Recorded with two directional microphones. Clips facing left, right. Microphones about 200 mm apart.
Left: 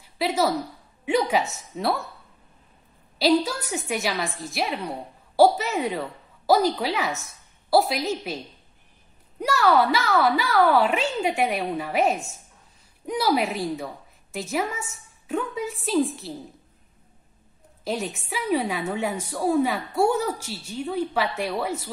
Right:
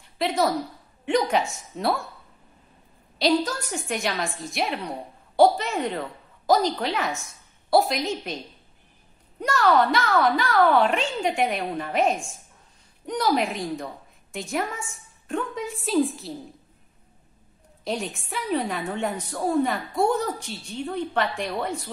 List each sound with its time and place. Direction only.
0.0 s a sound: 5° left (ahead or behind)
1.0 s a woman's voice: 5° left (ahead or behind)
3.4 s a woman's voice: 10° left (ahead or behind)
9.4 s a woman's voice: 5° left (ahead or behind)
17.8 s a woman's voice: centre (ahead or behind)